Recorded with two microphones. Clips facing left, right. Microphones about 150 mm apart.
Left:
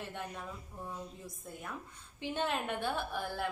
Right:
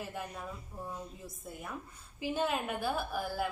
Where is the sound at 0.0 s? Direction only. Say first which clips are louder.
Right 1 dB; 5° right (ahead or behind).